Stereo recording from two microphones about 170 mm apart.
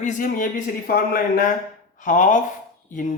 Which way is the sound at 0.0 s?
50° left (ahead or behind).